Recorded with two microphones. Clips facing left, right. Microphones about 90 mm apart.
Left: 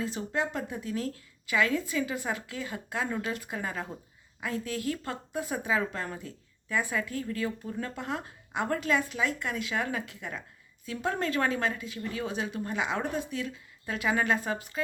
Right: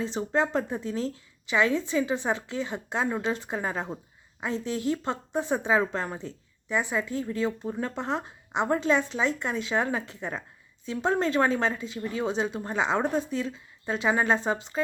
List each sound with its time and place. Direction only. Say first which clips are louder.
0.0 s speech: right 5 dB; 30° right (ahead or behind)